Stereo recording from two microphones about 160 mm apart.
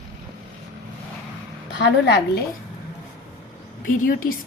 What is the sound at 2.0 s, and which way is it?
Speech, 90° left.